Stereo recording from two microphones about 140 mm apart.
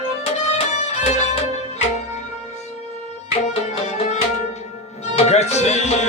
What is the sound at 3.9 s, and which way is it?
Music, 55° left (ahead or behind).